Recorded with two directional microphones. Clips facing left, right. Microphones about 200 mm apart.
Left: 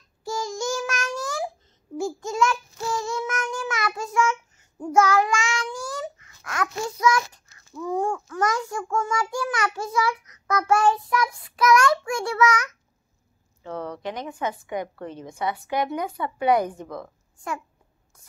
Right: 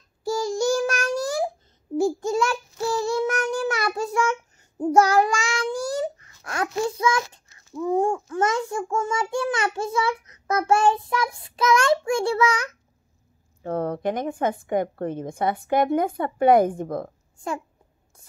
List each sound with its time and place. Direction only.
0.2 s child singing: 35° right (ahead or behind)
13.6 s a woman's voice: 50° right (ahead or behind)